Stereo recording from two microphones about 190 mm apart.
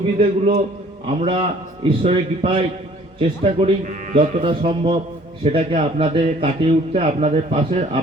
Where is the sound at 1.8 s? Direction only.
30° right (ahead or behind).